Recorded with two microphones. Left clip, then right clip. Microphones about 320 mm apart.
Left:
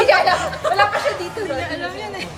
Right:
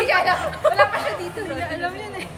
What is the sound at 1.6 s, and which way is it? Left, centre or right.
Speech, centre.